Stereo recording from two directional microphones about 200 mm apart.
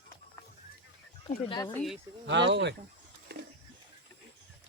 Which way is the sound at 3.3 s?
55° right (ahead or behind).